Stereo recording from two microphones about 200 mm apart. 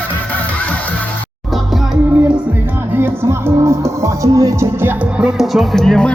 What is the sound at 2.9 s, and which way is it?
Music, 10° right (ahead or behind).